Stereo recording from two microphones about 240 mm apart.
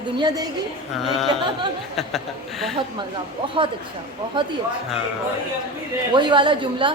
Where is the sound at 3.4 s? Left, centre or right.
Right.